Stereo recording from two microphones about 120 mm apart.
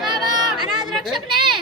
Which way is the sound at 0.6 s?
Centre (ahead or behind).